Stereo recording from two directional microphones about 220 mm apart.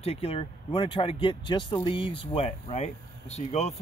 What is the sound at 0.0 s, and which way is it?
Speech, 25° left (ahead or behind).